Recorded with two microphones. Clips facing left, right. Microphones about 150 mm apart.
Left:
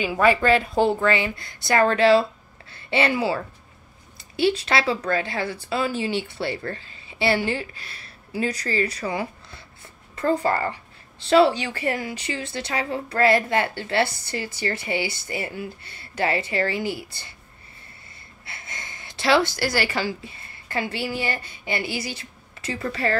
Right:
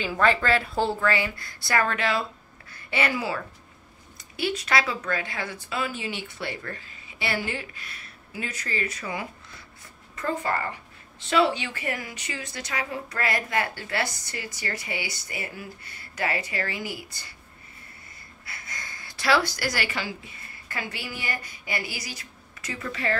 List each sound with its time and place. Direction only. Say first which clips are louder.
0.0 s a woman's voice: left 4 dB; 10° left (ahead or behind); by 17.3 s 30° left (ahead or behind)
18.4 s a sound: left 2 dB; 25° left (ahead or behind)
20.6 s a woman's voice: left 8 dB; 30° left (ahead or behind)